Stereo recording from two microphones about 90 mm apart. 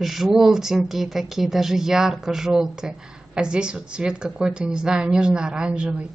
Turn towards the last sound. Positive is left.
turn(degrees=-15)  # may be behind; listen again after turning